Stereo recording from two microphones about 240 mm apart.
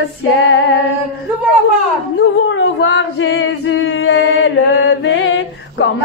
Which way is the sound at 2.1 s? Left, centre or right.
Left.